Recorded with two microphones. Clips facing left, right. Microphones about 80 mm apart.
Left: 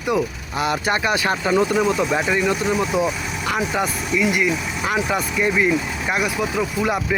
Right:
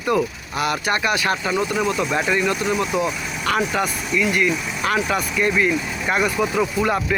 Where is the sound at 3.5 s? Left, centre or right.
Centre.